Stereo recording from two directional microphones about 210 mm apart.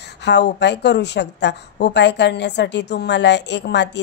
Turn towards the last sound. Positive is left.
turn(degrees=55)  # may be behind; listen again after turning